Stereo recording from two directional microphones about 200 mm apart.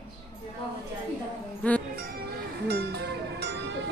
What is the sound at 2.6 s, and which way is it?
Music, 55° right (ahead or behind).